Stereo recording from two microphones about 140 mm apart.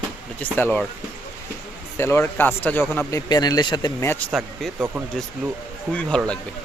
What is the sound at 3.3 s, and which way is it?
Speech, 30° left (ahead or behind).